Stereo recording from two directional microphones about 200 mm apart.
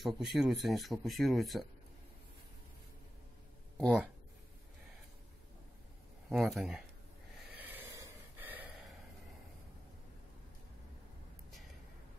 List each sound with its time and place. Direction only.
0.0 s speech: centre (ahead or behind)
6.2 s speech: centre (ahead or behind)
7.3 s gasp: 10° right (ahead or behind)